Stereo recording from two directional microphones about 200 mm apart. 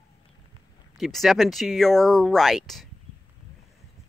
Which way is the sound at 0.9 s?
Centre (ahead or behind).